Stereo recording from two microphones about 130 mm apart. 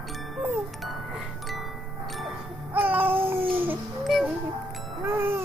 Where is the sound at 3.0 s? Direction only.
45° right (ahead or behind).